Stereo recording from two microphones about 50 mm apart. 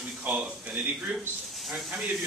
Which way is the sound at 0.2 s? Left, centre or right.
Right.